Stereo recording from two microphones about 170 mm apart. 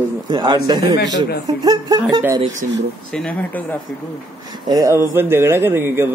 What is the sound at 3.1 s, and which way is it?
Speech, 10° left (ahead or behind).